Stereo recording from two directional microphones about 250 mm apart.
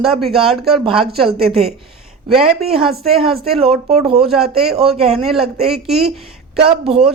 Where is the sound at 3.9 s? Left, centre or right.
Right.